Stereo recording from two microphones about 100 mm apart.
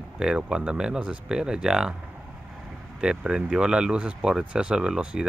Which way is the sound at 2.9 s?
10° right (ahead or behind).